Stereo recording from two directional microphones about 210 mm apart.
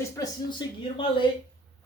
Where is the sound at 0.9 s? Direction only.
25° left (ahead or behind).